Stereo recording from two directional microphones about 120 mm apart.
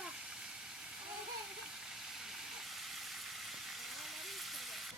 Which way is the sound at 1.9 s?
5° right (ahead or behind).